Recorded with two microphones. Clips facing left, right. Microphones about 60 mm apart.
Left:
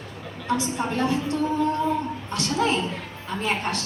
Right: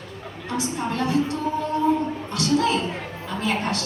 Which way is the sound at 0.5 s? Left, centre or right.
Left.